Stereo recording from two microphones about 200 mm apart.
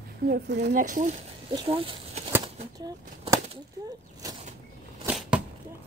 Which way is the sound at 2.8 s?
20° right (ahead or behind).